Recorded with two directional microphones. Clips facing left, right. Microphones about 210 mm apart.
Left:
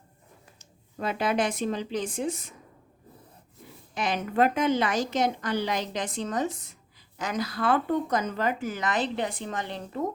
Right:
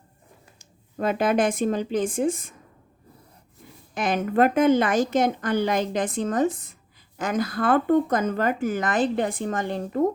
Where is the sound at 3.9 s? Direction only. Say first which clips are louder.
Right 5 dB; 50° right (ahead or behind).